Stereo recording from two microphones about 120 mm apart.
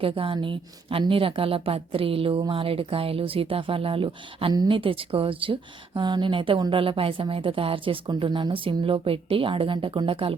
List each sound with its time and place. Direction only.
0.0 s a woman's voice: 45° right (ahead or behind)
4.5 s a woman's voice: 35° right (ahead or behind)
4.8 s a woman's voice: 50° right (ahead or behind)